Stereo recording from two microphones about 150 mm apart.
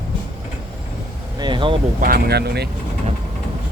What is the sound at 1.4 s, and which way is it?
Speech, 30° right (ahead or behind).